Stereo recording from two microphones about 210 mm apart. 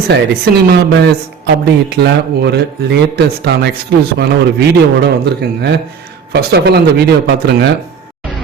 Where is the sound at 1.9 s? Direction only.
50° right (ahead or behind).